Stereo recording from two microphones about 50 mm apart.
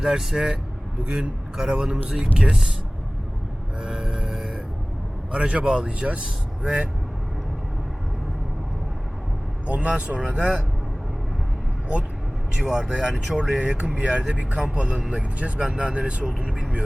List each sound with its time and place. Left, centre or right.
0.0 s a man's voice: centre
3.8 s a sound: centre
5.3 s speech: right
9.6 s speech: right
12.5 s a man's voice: centre
14.9 s a man's voice: centre